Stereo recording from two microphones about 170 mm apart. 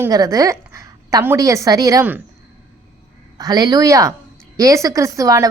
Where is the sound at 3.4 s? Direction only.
20° right (ahead or behind).